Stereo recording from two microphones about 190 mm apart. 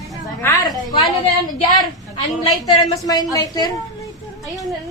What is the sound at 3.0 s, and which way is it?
Speech, 20° left (ahead or behind).